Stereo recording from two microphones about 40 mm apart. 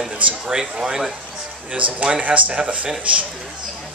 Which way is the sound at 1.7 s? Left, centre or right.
Right.